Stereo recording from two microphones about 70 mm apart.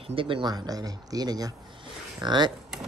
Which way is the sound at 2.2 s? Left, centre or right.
Right.